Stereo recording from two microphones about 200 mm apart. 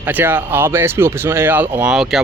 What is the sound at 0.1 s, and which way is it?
Speech, 10° right (ahead or behind).